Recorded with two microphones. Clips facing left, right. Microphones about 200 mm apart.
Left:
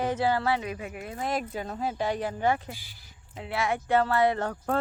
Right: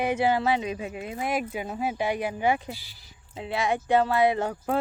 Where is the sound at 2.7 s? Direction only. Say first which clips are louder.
Right 3 dB; 50° left (ahead or behind).